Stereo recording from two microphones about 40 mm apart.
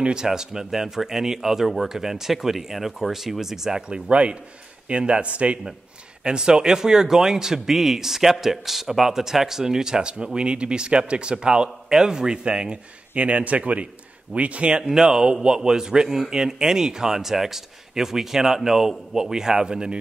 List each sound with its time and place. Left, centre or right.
0.0 s a man's voice: centre
3.9 s a man's voice: right
6.2 s a man's voice: centre
13.1 s a man's voice: right
14.9 s a man's voice: centre